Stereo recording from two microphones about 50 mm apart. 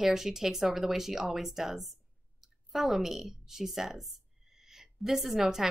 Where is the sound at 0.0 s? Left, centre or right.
Centre.